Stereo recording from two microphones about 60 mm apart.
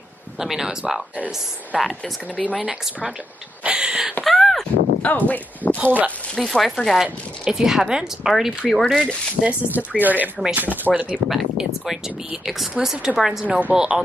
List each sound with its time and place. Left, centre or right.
0.4 s speech: centre
1.1 s speech: right
1.9 s speech: left
2.5 s speech: centre
4.2 s a sound: centre
5.0 s speech: left
5.8 s speech: right
6.3 s speech: centre
9.0 s speech: right
10.9 s speech: centre
11.2 s speech: centre
13.5 s speech: right
13.7 s speech: centre